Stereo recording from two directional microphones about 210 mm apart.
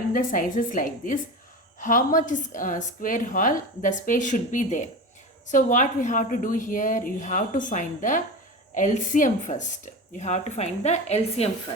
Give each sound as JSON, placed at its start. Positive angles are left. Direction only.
{"t": 0.1, "sound": "a woman's voice", "side_deg": 40}